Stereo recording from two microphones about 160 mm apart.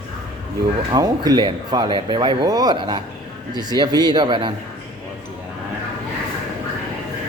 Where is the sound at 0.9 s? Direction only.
25° right (ahead or behind).